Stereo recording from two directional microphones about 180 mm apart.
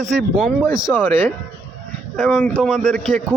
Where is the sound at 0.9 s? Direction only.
10° left (ahead or behind).